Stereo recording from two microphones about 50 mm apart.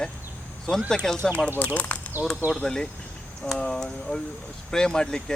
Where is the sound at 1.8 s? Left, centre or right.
Left.